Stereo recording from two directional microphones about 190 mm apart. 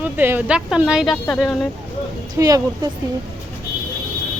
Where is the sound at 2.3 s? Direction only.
20° right (ahead or behind).